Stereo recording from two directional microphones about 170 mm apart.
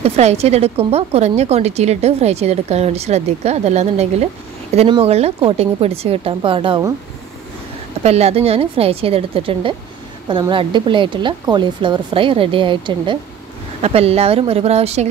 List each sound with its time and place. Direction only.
0.0 s a woman's voice: 40° right (ahead or behind)
8.0 s a woman's voice: 40° right (ahead or behind)